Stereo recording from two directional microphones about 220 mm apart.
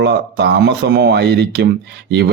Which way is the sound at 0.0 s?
50° right (ahead or behind).